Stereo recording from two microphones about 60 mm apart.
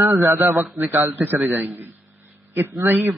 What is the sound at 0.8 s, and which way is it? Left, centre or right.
Speech, right.